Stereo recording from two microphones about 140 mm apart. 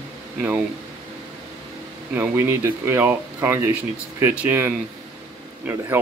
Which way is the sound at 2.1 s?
20° right (ahead or behind).